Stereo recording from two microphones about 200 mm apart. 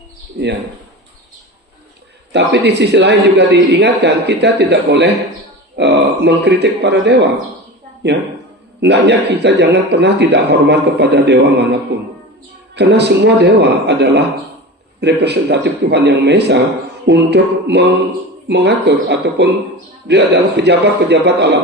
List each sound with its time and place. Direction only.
2.3 s speech: 60° right (ahead or behind)
8.8 s speech: 60° right (ahead or behind)